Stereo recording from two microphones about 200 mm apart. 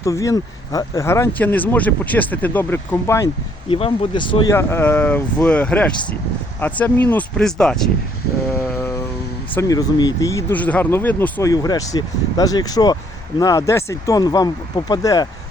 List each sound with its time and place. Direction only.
0.0 s speech: 15° left (ahead or behind)
3.7 s speech: 25° left (ahead or behind)
4.5 s speech: 10° left (ahead or behind)
9.6 s speech: 20° left (ahead or behind)